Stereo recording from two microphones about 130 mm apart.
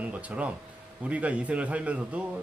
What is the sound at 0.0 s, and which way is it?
A man's voice, 10° right (ahead or behind).